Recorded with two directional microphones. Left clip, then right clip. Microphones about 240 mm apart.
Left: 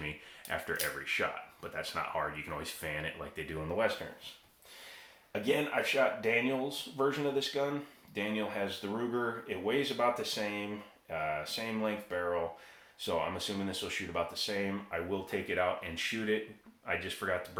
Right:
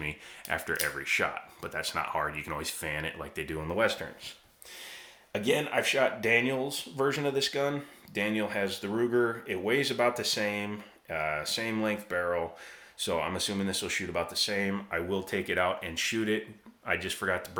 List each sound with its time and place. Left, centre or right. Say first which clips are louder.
0.0 s speech: right 4 dB; right
5.3 s speech: right 3 dB; right